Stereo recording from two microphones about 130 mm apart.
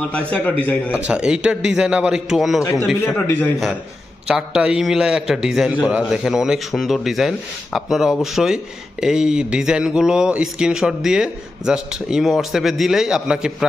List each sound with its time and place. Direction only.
0.0 s a man's voice: 10° left (ahead or behind)
0.9 s a man's voice: 10° right (ahead or behind)
2.6 s a man's voice: 25° left (ahead or behind)
4.3 s speech: 5° right (ahead or behind)